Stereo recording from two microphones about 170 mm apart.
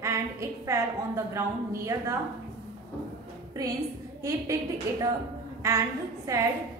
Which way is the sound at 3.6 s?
20° right (ahead or behind).